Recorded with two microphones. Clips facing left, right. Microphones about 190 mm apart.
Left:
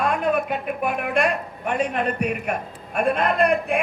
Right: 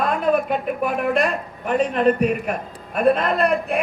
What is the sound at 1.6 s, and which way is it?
A man's voice, 35° right (ahead or behind).